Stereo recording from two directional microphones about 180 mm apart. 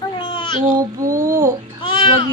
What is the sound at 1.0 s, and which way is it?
Speech, 15° right (ahead or behind).